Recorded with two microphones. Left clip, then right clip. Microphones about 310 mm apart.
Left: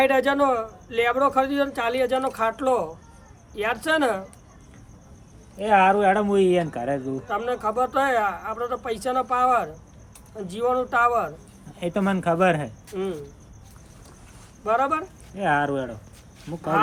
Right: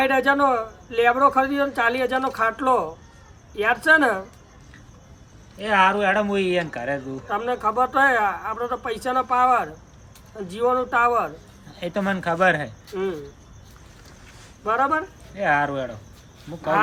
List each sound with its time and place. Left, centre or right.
0.0 s speech: centre
5.5 s speech: centre
7.3 s speech: centre
11.9 s speech: centre
14.6 s speech: centre